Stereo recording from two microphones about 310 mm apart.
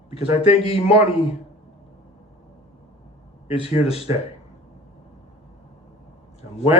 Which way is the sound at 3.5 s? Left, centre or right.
Centre.